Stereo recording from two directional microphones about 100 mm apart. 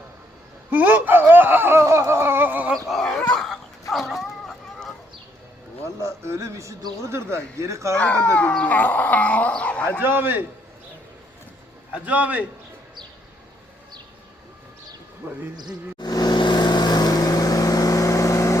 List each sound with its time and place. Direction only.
0.7 s a sound: 15° right (ahead or behind)
2.9 s dog: 5° left (ahead or behind)
3.9 s chicken: centre (ahead or behind)
6.0 s a sound: 30° right (ahead or behind)
7.9 s dog: 15° left (ahead or behind)
10.0 s a man's voice: 20° right (ahead or behind)
11.9 s a man's voice: 15° right (ahead or behind)
15.2 s a sound: 10° right (ahead or behind)
16.0 s vehicle: 45° left (ahead or behind)